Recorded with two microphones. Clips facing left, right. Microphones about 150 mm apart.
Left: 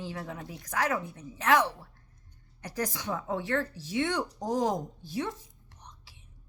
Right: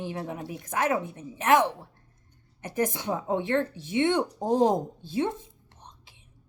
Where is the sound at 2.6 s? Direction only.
20° right (ahead or behind).